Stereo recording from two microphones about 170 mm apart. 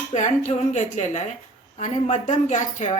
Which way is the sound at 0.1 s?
45° left (ahead or behind).